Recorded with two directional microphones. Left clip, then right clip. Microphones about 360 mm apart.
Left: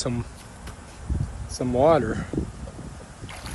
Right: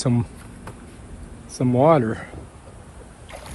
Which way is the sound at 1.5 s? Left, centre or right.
Centre.